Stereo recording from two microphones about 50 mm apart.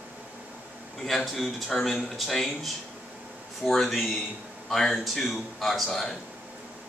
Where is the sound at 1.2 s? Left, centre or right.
Centre.